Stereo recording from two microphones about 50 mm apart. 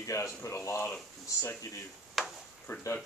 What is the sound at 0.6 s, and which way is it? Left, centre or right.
Speech, left.